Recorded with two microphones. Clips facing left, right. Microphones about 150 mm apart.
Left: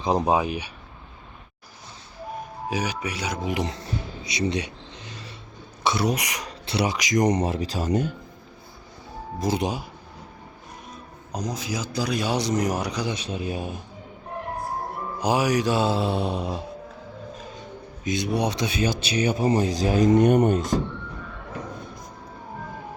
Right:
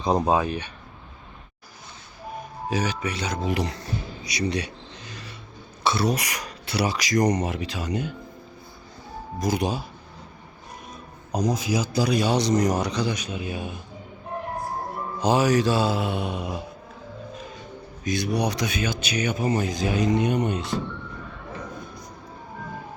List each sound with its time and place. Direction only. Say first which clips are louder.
0.3 s speech: even; 15° left (ahead or behind)
2.6 s speech: right 2 dB; 10° left (ahead or behind)
4.2 s a sound: left 1 dB; 25° left (ahead or behind)
5.8 s speech: even; 15° left (ahead or behind); by 8.1 s 45° left (ahead or behind)
9.4 s speech: even; 25° left (ahead or behind)
11.3 s a man's voice: right 6 dB; 10° right (ahead or behind); by 13.1 s 10° left (ahead or behind)
13.1 s speech: left 2 dB; 30° left (ahead or behind)
15.2 s speech: right 2 dB; 10° left (ahead or behind); by 16.6 s 30° left (ahead or behind)
18.0 s speech: even; 25° left (ahead or behind); by 20.7 s 45° left (ahead or behind)